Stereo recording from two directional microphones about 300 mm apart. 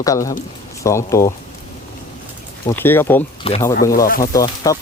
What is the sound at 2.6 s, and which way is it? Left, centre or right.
Speech, centre.